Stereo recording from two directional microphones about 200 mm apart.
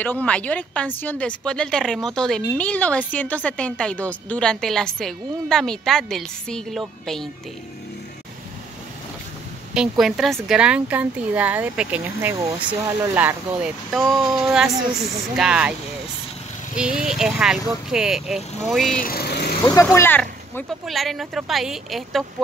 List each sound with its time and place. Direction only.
0.0 s a woman's voice: 5° left (ahead or behind)
9.8 s a woman's voice: centre (ahead or behind)
16.7 s a woman's voice: 5° right (ahead or behind)
18.9 s speech: 50° left (ahead or behind)
19.6 s a woman's voice: 15° left (ahead or behind)